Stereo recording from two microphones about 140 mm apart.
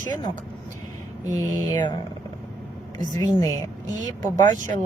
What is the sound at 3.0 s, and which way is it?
A woman's voice, 25° left (ahead or behind).